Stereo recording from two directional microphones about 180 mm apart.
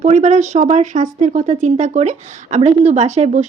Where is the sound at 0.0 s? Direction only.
40° right (ahead or behind).